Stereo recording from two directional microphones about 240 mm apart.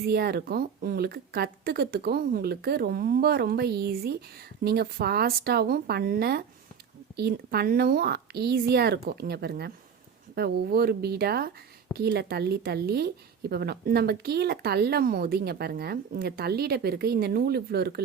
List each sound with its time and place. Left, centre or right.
0.0 s a woman's voice: right